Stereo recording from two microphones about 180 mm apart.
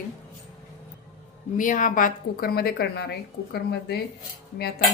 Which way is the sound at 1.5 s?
45° left (ahead or behind).